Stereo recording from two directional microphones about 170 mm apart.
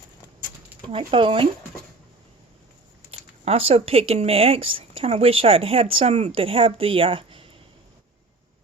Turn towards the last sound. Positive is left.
turn(degrees=-30)  # may be behind; listen again after turning